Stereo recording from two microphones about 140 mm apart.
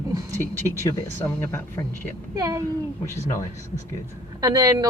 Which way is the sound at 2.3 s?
25° right (ahead or behind).